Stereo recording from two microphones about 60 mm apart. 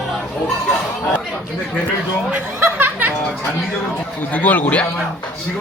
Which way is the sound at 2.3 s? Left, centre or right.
Right.